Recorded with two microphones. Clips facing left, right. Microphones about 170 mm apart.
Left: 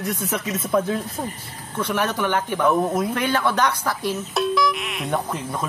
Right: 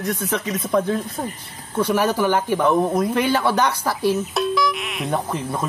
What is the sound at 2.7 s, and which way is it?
Speech, 5° left (ahead or behind).